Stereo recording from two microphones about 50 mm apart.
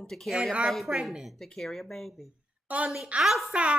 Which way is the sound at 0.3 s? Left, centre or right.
Centre.